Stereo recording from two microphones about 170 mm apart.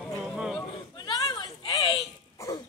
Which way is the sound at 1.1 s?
25° left (ahead or behind).